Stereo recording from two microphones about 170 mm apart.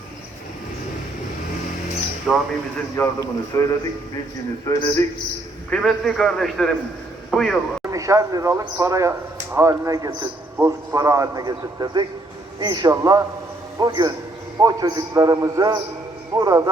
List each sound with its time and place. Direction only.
2.3 s a man's voice: centre (ahead or behind)
2.9 s a man's voice: 20° left (ahead or behind)
5.7 s a man's voice: centre (ahead or behind)
7.9 s speech: 20° right (ahead or behind)